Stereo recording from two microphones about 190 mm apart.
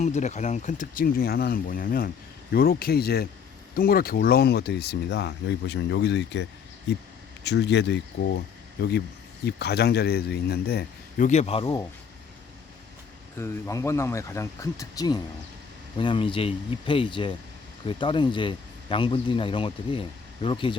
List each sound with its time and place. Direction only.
0.0 s speech: 40° left (ahead or behind); by 8.4 s 65° left (ahead or behind)
9.5 s speech: 60° left (ahead or behind)
11.3 s speech: 35° left (ahead or behind)
13.3 s speech: 15° left (ahead or behind)